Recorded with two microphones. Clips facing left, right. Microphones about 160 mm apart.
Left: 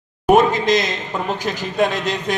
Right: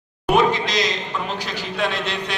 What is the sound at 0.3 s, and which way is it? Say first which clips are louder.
A man's voice: left 5 dB; 45° left (ahead or behind).